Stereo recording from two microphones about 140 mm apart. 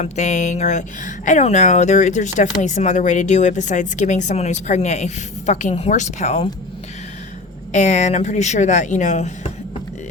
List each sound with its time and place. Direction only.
0.0 s speech: 55° left (ahead or behind)
7.7 s speech: 55° left (ahead or behind)